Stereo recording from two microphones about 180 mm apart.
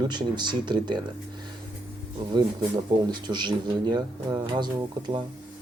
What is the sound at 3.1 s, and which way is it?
Speech, 25° right (ahead or behind).